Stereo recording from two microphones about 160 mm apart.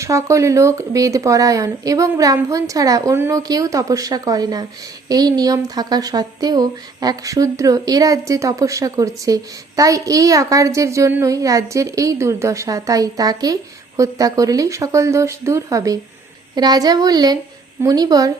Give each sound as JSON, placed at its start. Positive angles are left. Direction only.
{"t": 0.0, "sound": "speech", "side_deg": -20}